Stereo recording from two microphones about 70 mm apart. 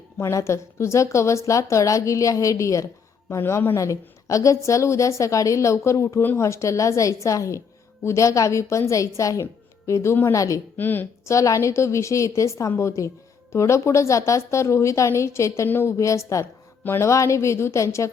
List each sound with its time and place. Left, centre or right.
0.2 s speech: left
3.8 s speech: left
10.8 s speech: left
11.3 s speech: left
16.8 s speech: left
17.1 s speech: left